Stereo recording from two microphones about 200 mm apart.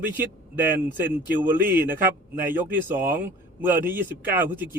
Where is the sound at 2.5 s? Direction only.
10° right (ahead or behind).